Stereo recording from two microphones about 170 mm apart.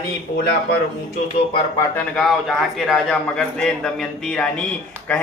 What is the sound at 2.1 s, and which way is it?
A man's voice, centre (ahead or behind).